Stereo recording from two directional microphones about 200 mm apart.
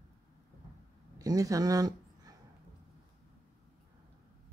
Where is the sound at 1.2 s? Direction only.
15° right (ahead or behind).